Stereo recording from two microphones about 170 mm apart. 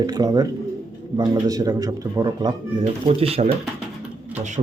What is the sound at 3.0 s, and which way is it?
Speech, 35° right (ahead or behind).